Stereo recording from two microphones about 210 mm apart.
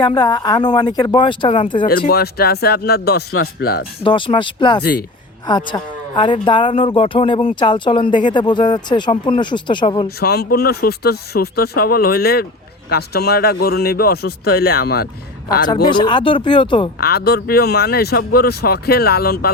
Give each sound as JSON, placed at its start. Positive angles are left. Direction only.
{"t": 0.0, "sound": "speech", "side_deg": 20}
{"t": 1.9, "sound": "speech", "side_deg": 45}
{"t": 4.0, "sound": "speech", "side_deg": 25}
{"t": 4.8, "sound": "speech", "side_deg": 45}
{"t": 5.5, "sound": "speech", "side_deg": 20}
{"t": 10.2, "sound": "speech", "side_deg": 50}
{"t": 15.6, "sound": "speech", "side_deg": 20}
{"t": 17.0, "sound": "speech", "side_deg": 50}